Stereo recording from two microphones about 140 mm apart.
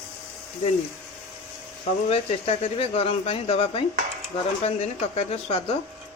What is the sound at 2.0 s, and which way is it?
Speech, 45° left (ahead or behind).